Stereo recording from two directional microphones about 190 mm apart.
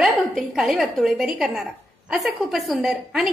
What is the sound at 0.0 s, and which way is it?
A woman's voice, centre (ahead or behind).